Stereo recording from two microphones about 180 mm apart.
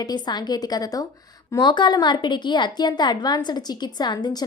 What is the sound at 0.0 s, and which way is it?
A woman's voice, 20° left (ahead or behind).